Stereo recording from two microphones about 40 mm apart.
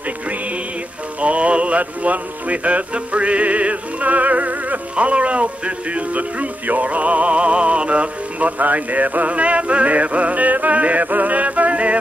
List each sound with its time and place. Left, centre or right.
1.2 s mantra: right
4.9 s music: right